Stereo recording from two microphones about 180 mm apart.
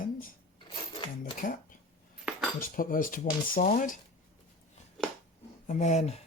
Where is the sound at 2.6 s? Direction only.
50° left (ahead or behind).